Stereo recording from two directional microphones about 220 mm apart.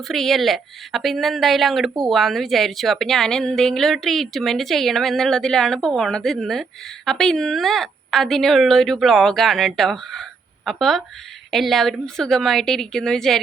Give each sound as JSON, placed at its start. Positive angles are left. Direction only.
{"t": 0.1, "sound": "a woman's voice", "side_deg": 0}